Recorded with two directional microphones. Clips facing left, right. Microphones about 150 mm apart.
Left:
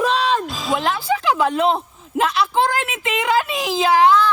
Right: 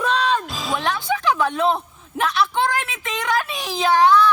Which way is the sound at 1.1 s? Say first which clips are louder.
Left 2 dB; 30° left (ahead or behind).